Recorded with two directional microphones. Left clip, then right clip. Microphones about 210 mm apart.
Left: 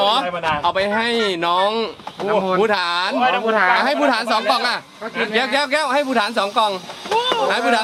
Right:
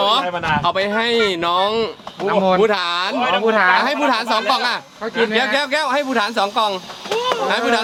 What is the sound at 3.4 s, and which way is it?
Speech, 45° right (ahead or behind).